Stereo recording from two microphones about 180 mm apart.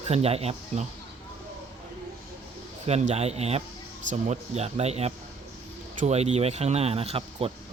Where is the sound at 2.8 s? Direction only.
35° right (ahead or behind).